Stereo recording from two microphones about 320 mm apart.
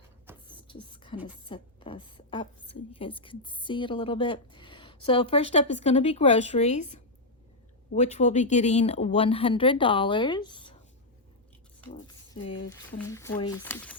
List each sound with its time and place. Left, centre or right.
0.4 s a sound: centre
1.5 s a woman's voice: centre
12.4 s speech: centre